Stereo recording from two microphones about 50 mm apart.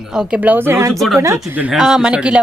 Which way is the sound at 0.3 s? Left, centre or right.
Right.